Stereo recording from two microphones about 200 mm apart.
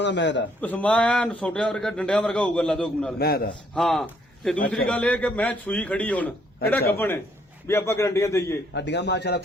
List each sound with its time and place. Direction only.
0.0 s a man's voice: 60° left (ahead or behind)
0.6 s a man's voice: 5° left (ahead or behind)
3.2 s a man's voice: 50° left (ahead or behind)
3.8 s a man's voice: centre (ahead or behind)
8.7 s a man's voice: 60° left (ahead or behind)